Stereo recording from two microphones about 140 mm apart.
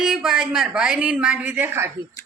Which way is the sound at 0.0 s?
5° right (ahead or behind).